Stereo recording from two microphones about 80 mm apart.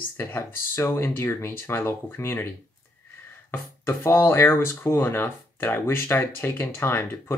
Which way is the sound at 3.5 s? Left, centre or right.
Left.